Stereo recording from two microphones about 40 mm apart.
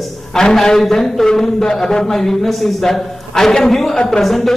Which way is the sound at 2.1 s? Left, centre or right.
Centre.